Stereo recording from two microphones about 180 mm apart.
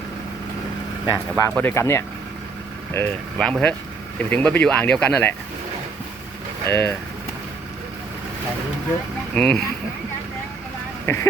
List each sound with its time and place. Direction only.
1.0 s speech: 20° left (ahead or behind)
6.7 s speech: 15° left (ahead or behind)
9.3 s speech: 5° left (ahead or behind)
11.0 s speech: 15° left (ahead or behind)